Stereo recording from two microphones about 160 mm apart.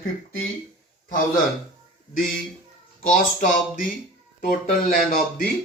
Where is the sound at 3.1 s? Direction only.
55° left (ahead or behind).